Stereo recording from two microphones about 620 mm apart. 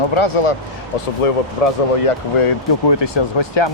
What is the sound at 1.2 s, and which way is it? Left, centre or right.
Speech, left.